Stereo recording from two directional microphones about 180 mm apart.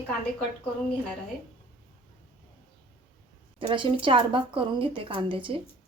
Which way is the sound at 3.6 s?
30° right (ahead or behind).